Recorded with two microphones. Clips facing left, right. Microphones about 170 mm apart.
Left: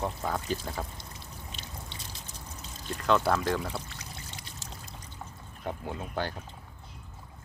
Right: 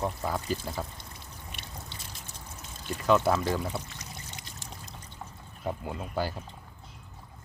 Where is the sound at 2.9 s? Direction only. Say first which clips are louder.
Right 2 dB; 5° right (ahead or behind).